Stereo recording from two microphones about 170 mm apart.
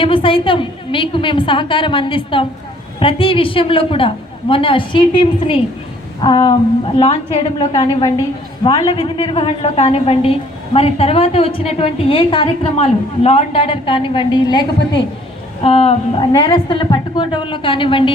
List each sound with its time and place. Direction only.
0.0 s a woman's voice: 30° left (ahead or behind)
7.7 s a woman's voice: 25° left (ahead or behind)
15.6 s a woman's voice: 35° left (ahead or behind)